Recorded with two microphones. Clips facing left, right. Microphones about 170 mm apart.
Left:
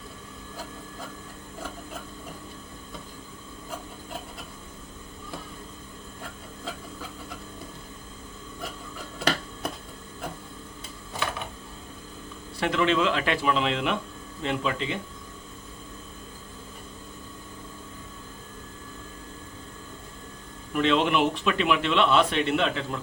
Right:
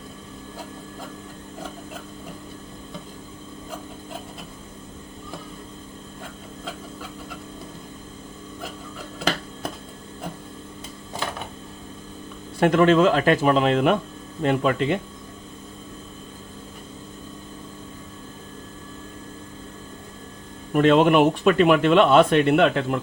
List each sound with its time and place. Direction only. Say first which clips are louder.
12.5 s speech: right 8 dB; 50° right (ahead or behind)
20.7 s speech: right 7 dB; 50° right (ahead or behind)